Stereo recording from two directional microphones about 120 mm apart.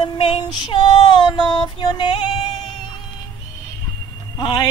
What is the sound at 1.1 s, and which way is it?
Music, 35° left (ahead or behind).